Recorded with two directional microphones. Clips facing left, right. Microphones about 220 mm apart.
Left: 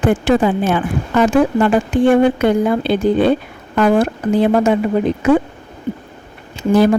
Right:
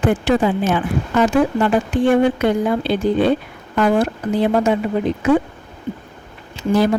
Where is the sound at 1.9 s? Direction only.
55° left (ahead or behind).